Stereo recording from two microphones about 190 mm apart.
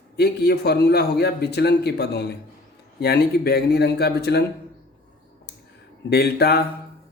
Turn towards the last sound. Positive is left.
turn(degrees=55)  # may be behind; listen again after turning